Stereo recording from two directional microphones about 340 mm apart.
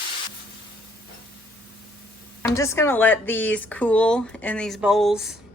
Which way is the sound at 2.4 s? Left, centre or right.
Centre.